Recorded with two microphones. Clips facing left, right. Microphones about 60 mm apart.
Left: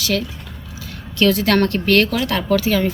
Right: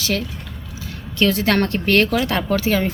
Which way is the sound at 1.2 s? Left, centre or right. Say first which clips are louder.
Left 2 dB; right.